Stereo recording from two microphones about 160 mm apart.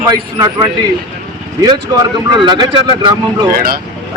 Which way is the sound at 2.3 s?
25° right (ahead or behind).